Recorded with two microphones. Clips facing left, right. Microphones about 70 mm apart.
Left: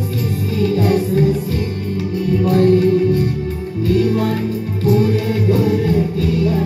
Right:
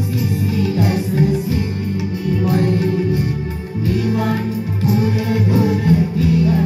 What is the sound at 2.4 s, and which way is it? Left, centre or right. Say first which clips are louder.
Music: left 6 dB; centre.